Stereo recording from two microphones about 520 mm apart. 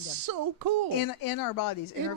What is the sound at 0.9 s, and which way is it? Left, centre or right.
Speech, left.